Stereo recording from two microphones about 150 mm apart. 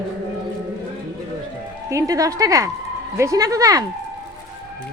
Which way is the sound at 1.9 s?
20° right (ahead or behind).